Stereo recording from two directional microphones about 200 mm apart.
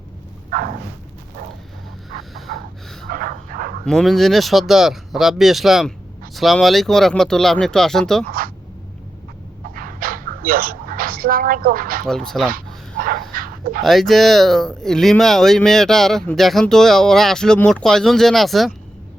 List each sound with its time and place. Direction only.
0.5 s a sound: 45° right (ahead or behind)
3.1 s dog: 45° right (ahead or behind)
3.8 s speech: centre (ahead or behind)
8.3 s a sound: 45° right (ahead or behind)
9.7 s dog: 45° right (ahead or behind)
12.0 s speech: 5° left (ahead or behind)
12.5 s dog: 45° right (ahead or behind)
13.8 s speech: centre (ahead or behind)